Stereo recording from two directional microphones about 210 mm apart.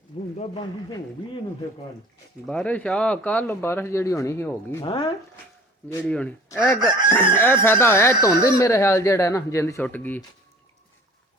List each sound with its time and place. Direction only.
0.3 s speech: 25° left (ahead or behind)
2.5 s speech: 5° left (ahead or behind)
4.8 s speech: 20° left (ahead or behind)
5.9 s speech: 5° left (ahead or behind)